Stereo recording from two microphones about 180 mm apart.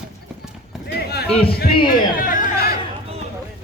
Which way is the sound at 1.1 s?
60° left (ahead or behind).